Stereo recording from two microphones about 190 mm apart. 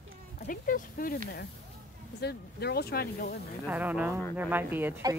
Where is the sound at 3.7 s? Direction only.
10° right (ahead or behind).